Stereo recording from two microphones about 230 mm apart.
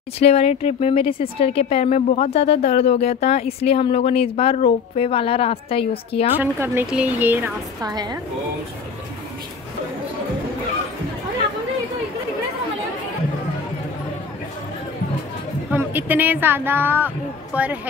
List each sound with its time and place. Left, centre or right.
0.2 s speech: left
6.3 s a woman's voice: centre
15.7 s a woman's voice: centre